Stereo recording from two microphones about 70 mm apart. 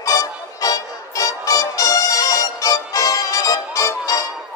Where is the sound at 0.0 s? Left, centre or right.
Left.